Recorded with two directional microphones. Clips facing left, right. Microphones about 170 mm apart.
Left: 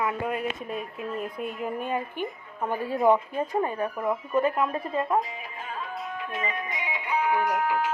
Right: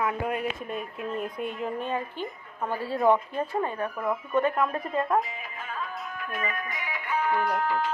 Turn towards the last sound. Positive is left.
turn(degrees=10)  # may be behind; listen again after turning